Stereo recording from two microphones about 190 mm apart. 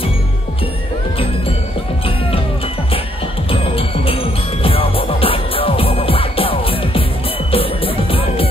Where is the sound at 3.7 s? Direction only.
30° left (ahead or behind).